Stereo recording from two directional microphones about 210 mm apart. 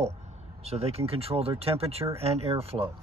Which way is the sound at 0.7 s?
30° right (ahead or behind).